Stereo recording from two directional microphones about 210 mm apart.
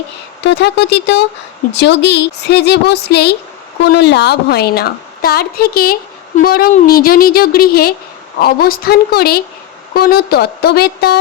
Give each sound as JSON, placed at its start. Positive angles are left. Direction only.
{"t": 0.4, "sound": "a woman's voice", "side_deg": 55}